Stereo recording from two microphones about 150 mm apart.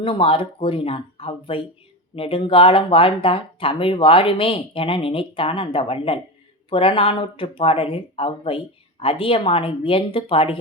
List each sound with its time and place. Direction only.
0.0 s speech: 35° left (ahead or behind)